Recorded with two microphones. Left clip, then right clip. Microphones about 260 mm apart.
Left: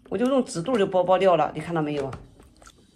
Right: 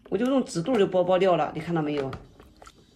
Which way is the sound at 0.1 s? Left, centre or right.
Left.